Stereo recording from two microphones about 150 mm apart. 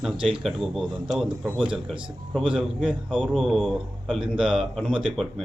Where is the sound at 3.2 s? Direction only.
5° left (ahead or behind).